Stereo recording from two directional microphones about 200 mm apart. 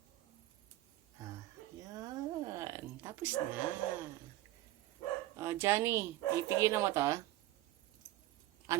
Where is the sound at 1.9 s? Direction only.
20° right (ahead or behind).